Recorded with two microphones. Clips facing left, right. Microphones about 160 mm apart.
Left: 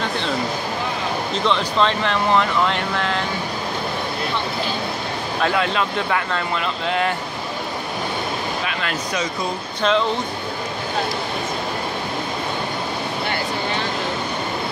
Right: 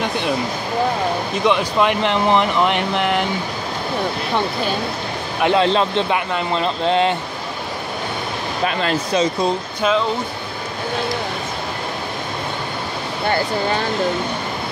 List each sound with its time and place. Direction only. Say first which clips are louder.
1.3 s speech: right 2 dB; 15° right (ahead or behind)
5.4 s speech: right 5 dB; 25° right (ahead or behind)
6.5 s speech: right 7 dB; 30° right (ahead or behind)
8.6 s speech: right 5 dB; 30° right (ahead or behind)
9.8 s speech: left 1 dB; 5° right (ahead or behind)